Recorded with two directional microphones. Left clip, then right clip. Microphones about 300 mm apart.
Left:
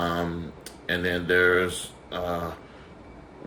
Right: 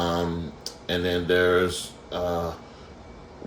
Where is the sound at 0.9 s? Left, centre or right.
Centre.